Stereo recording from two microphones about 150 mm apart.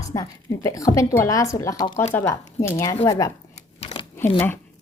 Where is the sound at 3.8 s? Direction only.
45° left (ahead or behind).